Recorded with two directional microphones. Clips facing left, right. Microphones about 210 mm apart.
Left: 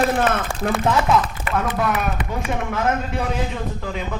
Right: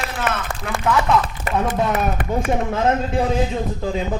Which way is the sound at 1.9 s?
50° right (ahead or behind).